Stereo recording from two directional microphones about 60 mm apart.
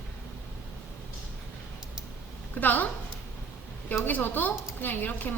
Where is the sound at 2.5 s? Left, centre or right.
Left.